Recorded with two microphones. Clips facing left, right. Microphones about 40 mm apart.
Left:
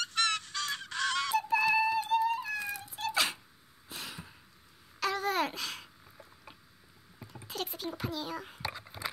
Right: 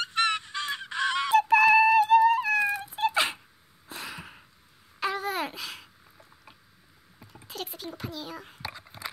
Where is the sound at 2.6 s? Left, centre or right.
Right.